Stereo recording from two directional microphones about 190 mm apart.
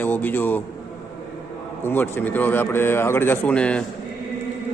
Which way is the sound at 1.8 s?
10° left (ahead or behind).